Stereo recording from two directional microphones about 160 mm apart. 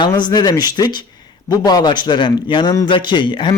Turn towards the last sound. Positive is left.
turn(degrees=30)  # may be behind; listen again after turning